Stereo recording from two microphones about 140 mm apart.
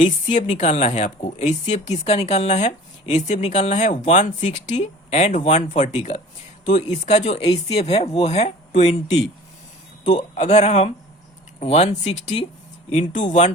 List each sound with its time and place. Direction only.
0.3 s a woman's voice: 55° left (ahead or behind)